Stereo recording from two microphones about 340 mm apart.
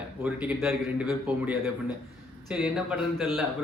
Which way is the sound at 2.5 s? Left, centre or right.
Centre.